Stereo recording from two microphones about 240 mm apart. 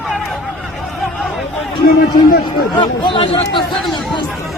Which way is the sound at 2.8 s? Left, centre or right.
Centre.